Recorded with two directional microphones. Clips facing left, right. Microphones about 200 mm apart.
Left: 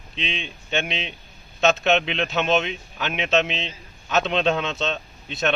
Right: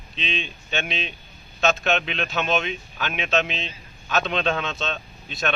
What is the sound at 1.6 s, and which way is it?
A man's voice, 20° left (ahead or behind).